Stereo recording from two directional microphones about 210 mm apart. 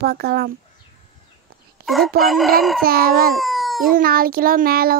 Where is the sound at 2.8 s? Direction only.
45° right (ahead or behind).